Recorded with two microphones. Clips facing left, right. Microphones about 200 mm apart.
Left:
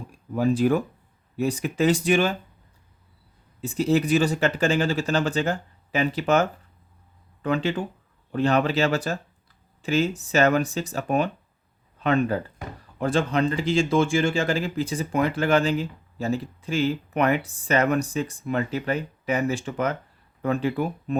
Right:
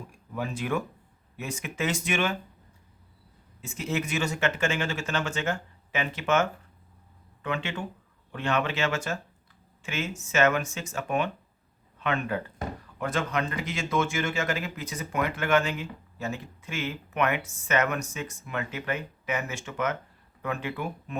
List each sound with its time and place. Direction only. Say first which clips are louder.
0.1 s speech: left 12 dB; 35° left (ahead or behind)
3.6 s speech: left 9 dB; 35° left (ahead or behind)